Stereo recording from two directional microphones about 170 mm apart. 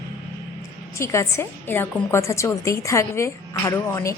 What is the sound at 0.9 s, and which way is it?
A woman's voice, 15° left (ahead or behind).